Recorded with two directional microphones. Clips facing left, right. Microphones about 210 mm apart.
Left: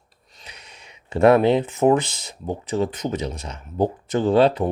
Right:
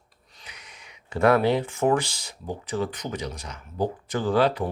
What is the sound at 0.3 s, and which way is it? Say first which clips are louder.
Speech: left 3 dB; 25° left (ahead or behind).